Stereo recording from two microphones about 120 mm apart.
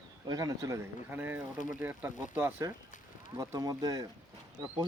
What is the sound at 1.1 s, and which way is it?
Speech, 15° right (ahead or behind).